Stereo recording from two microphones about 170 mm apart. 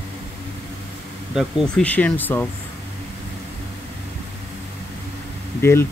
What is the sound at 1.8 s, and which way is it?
Speech, 10° left (ahead or behind).